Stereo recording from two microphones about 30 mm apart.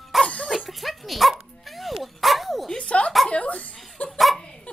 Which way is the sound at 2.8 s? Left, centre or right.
Left.